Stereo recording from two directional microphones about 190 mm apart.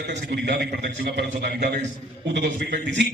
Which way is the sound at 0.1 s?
60° right (ahead or behind).